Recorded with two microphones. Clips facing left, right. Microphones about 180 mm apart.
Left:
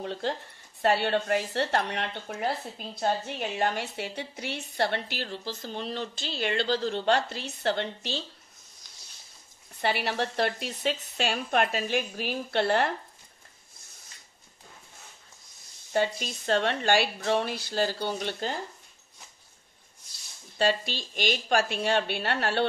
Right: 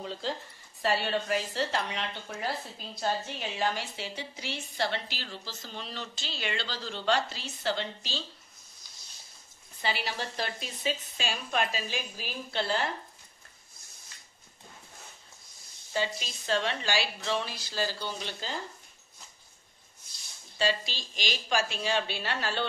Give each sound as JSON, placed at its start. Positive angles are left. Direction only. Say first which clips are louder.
{"t": 0.0, "sound": "a woman's voice", "louder": "left 4 dB", "side_deg": 60}
{"t": 9.8, "sound": "a woman's voice", "louder": "left 6 dB", "side_deg": 60}
{"t": 15.9, "sound": "a woman's voice", "louder": "left 5 dB", "side_deg": 55}
{"t": 20.5, "sound": "a woman's voice", "louder": "left 4 dB", "side_deg": 55}